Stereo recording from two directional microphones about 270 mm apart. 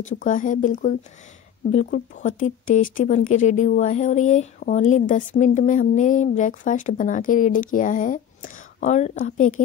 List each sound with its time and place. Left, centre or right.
0.0 s speech: left